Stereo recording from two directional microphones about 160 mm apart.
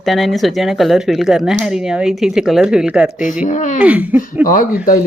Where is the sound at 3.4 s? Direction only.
50° left (ahead or behind).